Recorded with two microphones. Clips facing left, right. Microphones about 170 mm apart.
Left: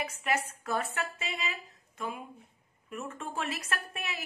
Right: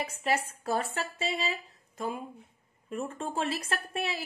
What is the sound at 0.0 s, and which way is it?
A woman's voice, 30° right (ahead or behind).